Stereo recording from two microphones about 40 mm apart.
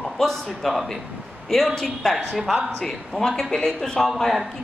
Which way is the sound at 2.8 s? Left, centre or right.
Centre.